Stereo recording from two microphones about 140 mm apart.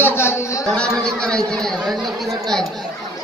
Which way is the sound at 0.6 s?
5° left (ahead or behind).